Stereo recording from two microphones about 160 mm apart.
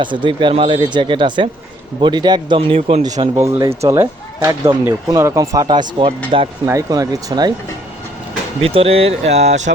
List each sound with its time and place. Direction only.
0.0 s speech: 30° right (ahead or behind)
6.7 s speech: 20° right (ahead or behind)
8.6 s speech: 35° right (ahead or behind)